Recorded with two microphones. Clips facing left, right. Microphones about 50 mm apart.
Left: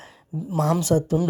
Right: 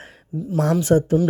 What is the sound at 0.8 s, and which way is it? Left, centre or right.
Speech, right.